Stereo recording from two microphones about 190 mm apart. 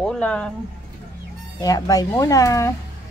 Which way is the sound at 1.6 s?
20° left (ahead or behind).